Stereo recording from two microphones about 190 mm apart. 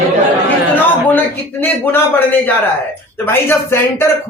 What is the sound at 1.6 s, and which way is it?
Speech, 10° left (ahead or behind).